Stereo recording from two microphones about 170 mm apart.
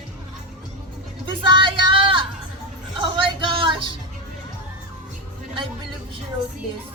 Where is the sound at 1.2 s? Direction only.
30° right (ahead or behind).